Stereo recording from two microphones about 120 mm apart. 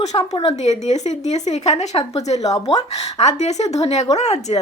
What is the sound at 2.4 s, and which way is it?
Speech, 30° left (ahead or behind).